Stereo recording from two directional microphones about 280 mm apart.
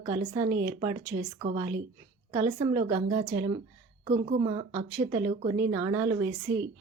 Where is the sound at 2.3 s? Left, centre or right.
Centre.